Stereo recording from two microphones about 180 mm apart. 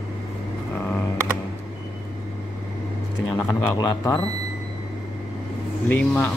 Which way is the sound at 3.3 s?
20° left (ahead or behind).